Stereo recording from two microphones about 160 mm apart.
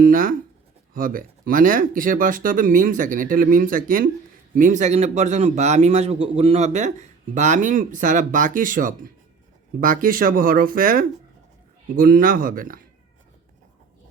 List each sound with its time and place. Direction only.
0.0 s speech: 60° right (ahead or behind)